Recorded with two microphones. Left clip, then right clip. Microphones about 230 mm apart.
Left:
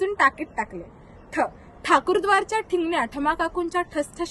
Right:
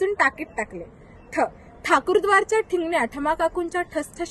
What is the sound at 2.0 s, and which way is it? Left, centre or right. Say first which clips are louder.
Speech: right 2 dB; centre.